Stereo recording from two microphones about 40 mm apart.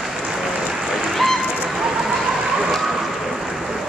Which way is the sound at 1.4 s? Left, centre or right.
Right.